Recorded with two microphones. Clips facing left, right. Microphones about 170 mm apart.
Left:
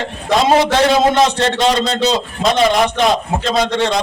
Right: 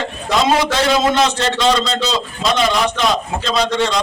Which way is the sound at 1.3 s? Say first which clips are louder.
Left 1 dB; 55° left (ahead or behind).